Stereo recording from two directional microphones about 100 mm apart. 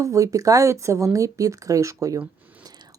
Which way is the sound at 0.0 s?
30° right (ahead or behind).